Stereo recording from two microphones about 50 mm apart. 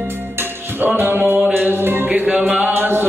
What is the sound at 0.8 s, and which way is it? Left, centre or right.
Music, right.